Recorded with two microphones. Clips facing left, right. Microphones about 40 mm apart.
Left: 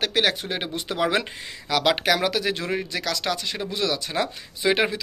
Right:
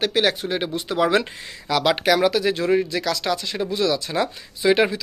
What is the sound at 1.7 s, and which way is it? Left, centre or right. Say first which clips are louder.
Speech: right 2 dB; left.